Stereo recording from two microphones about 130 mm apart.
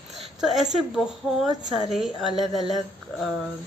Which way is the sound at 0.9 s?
Centre (ahead or behind).